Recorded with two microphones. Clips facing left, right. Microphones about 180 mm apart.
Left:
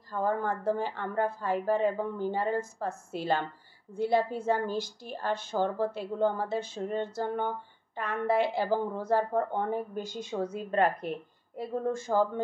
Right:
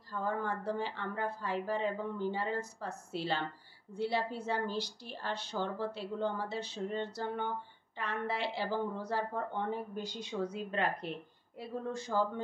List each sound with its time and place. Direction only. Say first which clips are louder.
0.1 s a woman's voice: left 6 dB; 50° left (ahead or behind)